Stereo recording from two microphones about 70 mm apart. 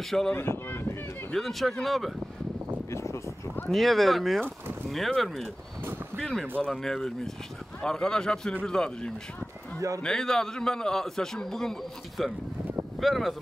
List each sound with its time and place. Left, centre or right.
0.3 s speech: left
1.3 s speech: centre
2.9 s a sound: left
3.7 s a man's voice: centre
9.8 s a man's voice: right
10.0 s a man's voice: centre